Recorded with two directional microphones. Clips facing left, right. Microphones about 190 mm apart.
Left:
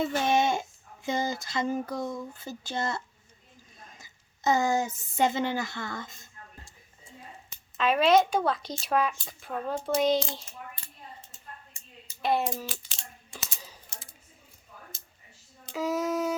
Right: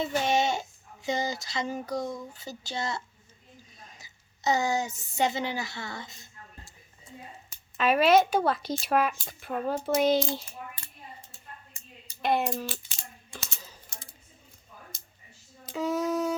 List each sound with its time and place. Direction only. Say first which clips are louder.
0.0 s a sound: left 1 dB; 55° left (ahead or behind)
3.9 s speech: even; 50° left (ahead or behind)
7.8 s speech: right 1 dB; 5° right (ahead or behind)
12.2 s speech: right 1 dB; centre (ahead or behind)
13.4 s typing: left 1 dB; 10° left (ahead or behind)
15.7 s speech: right 1 dB; centre (ahead or behind)